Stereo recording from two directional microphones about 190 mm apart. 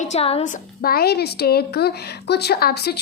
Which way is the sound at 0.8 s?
50° left (ahead or behind).